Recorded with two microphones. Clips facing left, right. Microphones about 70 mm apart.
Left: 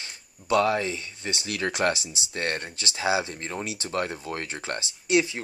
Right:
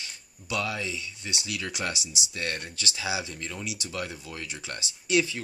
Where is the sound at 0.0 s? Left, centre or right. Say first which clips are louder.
Left 1 dB; left.